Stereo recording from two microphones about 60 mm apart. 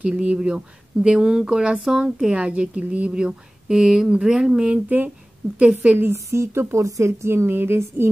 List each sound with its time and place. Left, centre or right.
0.0 s speech: right
4.8 s speech: right
5.6 s speech: centre
6.1 s a woman's voice: right